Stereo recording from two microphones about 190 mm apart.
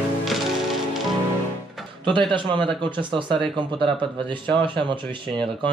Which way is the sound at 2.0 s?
25° right (ahead or behind).